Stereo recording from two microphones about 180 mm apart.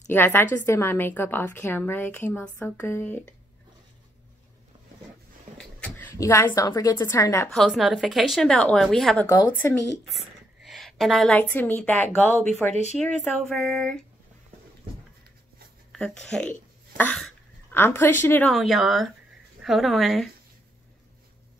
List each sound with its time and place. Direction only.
0.1 s a woman's voice: 10° left (ahead or behind)
5.6 s speech: 10° left (ahead or behind)
7.5 s a woman's voice: centre (ahead or behind)
9.3 s a woman's voice: 15° left (ahead or behind)
10.0 s a woman's voice: centre (ahead or behind)
15.9 s a woman's voice: 5° left (ahead or behind)
18.5 s a woman's voice: centre (ahead or behind)